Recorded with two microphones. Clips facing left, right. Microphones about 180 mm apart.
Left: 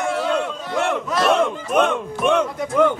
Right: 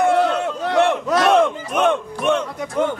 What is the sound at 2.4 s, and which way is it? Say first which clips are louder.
Speech: left 4 dB; 80° left.